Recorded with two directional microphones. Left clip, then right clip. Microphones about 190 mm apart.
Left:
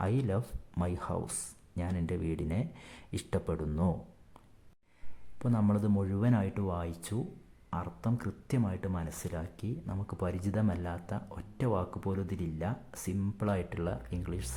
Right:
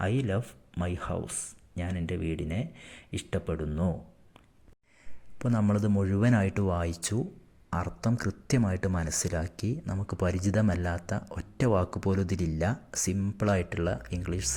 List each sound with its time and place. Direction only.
0.0 s speech: centre (ahead or behind)
5.4 s speech: 10° right (ahead or behind)
7.7 s speech: 15° right (ahead or behind)